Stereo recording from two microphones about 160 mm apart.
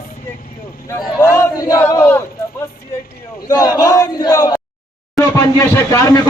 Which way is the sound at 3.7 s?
20° left (ahead or behind).